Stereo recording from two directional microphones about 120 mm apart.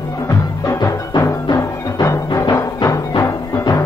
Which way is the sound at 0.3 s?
25° left (ahead or behind).